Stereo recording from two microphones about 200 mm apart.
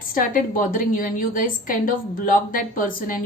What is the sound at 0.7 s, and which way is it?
A woman's voice, 45° left (ahead or behind).